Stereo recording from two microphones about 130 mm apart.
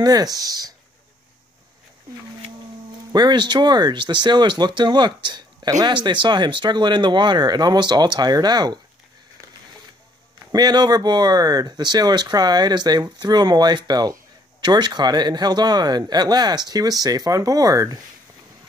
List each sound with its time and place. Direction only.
0.0 s speech: 30° right (ahead or behind)
3.1 s speech: 35° right (ahead or behind)
10.5 s speech: 30° right (ahead or behind)